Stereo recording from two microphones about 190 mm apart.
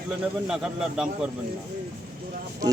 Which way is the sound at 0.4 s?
5° right (ahead or behind).